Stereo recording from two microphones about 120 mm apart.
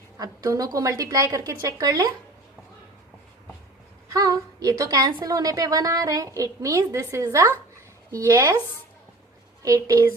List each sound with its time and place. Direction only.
0.2 s a woman's voice: 30° right (ahead or behind)
4.1 s a woman's voice: 30° right (ahead or behind)
9.6 s a woman's voice: 30° right (ahead or behind)